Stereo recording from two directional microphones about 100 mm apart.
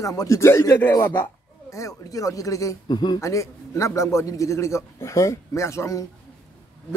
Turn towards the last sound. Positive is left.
turn(degrees=30)  # may be behind; listen again after turning